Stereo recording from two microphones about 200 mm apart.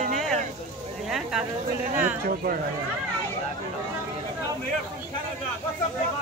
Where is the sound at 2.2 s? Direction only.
45° right (ahead or behind).